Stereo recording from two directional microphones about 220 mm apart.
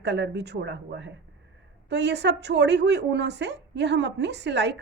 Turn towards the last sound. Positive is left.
turn(degrees=-50)  # may be behind; listen again after turning